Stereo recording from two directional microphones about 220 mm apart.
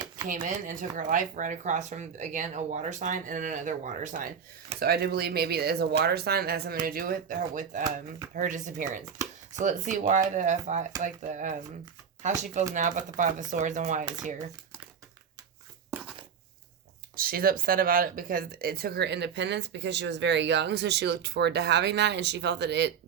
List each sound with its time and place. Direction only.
0.3 s speech: 35° right (ahead or behind)
17.2 s speech: 40° right (ahead or behind)